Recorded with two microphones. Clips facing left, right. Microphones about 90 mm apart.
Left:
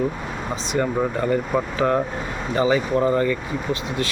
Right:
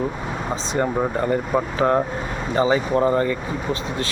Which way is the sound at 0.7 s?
30° right (ahead or behind).